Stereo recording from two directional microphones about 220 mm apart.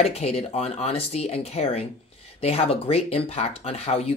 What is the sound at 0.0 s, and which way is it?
Speech, 30° left (ahead or behind).